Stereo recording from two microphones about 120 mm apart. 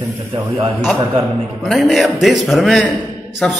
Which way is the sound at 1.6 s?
Centre (ahead or behind).